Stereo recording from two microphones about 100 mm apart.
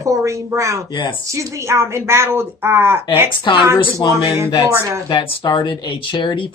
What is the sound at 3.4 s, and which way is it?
Speech, 50° left (ahead or behind).